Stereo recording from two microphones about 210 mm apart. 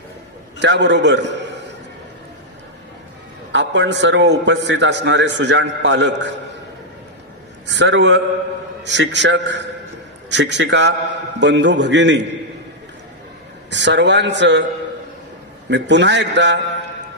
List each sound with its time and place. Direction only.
0.6 s a man's voice: 55° right (ahead or behind)
3.5 s a man's voice: 55° right (ahead or behind)
7.6 s a man's voice: 55° right (ahead or behind)
13.7 s a man's voice: 55° right (ahead or behind)
15.7 s a man's voice: 55° right (ahead or behind)